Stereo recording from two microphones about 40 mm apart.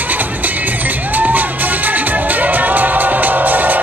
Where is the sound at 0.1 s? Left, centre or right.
Right.